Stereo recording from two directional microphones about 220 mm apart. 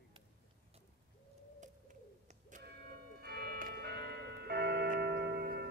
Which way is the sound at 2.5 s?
35° right (ahead or behind).